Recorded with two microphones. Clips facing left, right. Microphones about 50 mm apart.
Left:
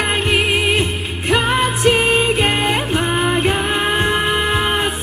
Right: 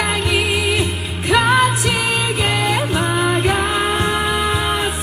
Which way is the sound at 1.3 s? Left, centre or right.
Right.